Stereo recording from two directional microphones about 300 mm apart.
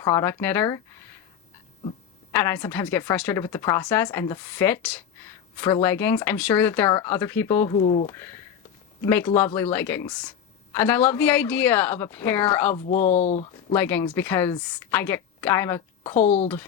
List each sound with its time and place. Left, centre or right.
0.0 s a woman's voice: centre
2.3 s a woman's voice: centre
12.9 s speech: left
13.7 s a woman's voice: centre
16.0 s speech: left